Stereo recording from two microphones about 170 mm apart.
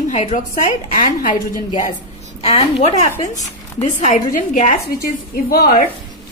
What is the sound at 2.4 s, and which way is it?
Speech, 40° left (ahead or behind).